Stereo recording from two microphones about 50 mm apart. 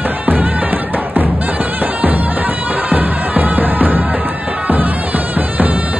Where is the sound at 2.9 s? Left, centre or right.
Right.